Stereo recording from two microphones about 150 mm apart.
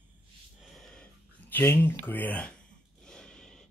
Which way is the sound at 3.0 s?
5° left (ahead or behind).